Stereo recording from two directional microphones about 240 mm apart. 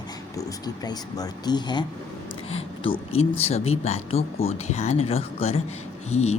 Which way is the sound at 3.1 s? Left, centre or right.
Left.